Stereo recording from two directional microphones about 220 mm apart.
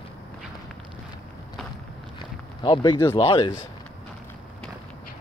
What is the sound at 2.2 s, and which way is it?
Run, 20° left (ahead or behind).